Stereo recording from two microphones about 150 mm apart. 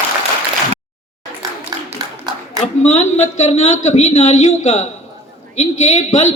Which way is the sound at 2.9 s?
50° left (ahead or behind).